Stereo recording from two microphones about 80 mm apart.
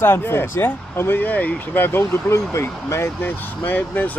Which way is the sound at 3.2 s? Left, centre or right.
Left.